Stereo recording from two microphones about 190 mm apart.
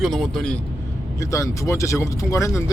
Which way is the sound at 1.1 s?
15° left (ahead or behind).